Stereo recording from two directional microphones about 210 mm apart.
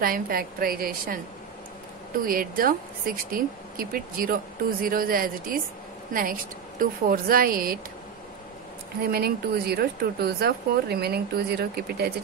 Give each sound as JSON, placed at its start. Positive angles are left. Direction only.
{"t": 0.0, "sound": "a woman's voice", "side_deg": -45}
{"t": 6.8, "sound": "a woman's voice", "side_deg": -45}
{"t": 9.1, "sound": "a woman's voice", "side_deg": -50}